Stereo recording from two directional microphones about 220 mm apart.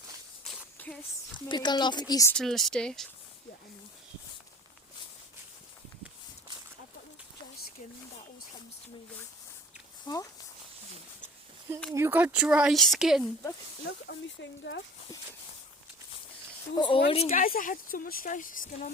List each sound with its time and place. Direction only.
0.4 s a sound: 5° left (ahead or behind)
1.5 s speech: 20° left (ahead or behind)
2.3 s speech: centre (ahead or behind)
10.1 s speech: 20° left (ahead or behind)
11.9 s speech: 10° right (ahead or behind)
13.8 s speech: 55° left (ahead or behind)
16.7 s speech: 20° left (ahead or behind)